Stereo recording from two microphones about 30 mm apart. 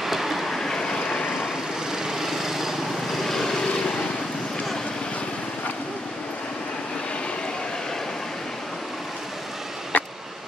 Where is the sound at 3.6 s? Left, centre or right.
Left.